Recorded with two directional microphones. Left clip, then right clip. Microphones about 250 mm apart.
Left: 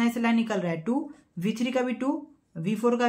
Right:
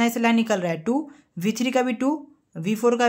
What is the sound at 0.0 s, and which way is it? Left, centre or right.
Speech, right.